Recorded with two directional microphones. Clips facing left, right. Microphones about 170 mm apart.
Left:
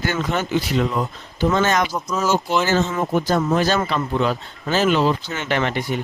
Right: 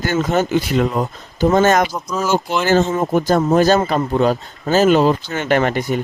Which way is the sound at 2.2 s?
10° right (ahead or behind).